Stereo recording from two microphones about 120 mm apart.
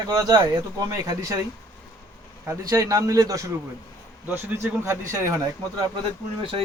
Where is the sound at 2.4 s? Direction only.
25° right (ahead or behind).